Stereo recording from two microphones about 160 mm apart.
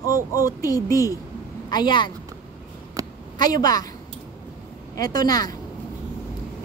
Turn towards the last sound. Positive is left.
turn(degrees=25)  # may be behind; listen again after turning